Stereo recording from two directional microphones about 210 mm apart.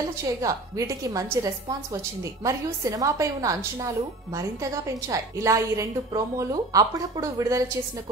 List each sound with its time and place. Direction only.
0.4 s a woman's voice: 15° right (ahead or behind)